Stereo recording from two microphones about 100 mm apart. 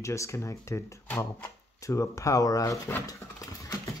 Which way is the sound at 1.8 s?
30° left (ahead or behind).